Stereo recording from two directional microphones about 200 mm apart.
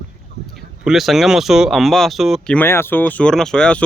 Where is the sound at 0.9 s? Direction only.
Centre (ahead or behind).